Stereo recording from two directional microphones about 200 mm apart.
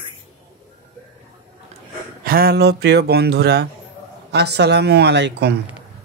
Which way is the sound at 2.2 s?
50° right (ahead or behind).